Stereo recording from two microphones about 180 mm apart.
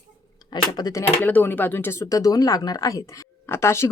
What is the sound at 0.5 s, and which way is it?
Speech, 25° left (ahead or behind).